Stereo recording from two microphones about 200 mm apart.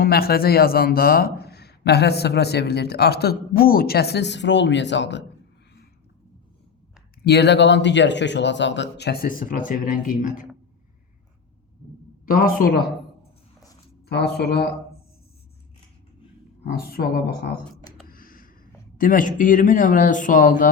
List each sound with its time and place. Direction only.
0.0 s a man's voice: 50° left (ahead or behind)
7.3 s speech: 55° left (ahead or behind); by 10.4 s 40° left (ahead or behind)
12.2 s a man's voice: 45° left (ahead or behind)
14.1 s speech: 55° left (ahead or behind)
16.6 s a man's voice: 50° left (ahead or behind)